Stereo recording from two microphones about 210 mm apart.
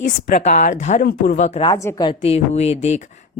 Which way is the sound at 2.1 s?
30° left (ahead or behind).